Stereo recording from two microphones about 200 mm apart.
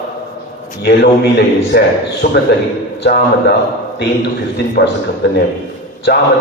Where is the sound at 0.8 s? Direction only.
55° left (ahead or behind).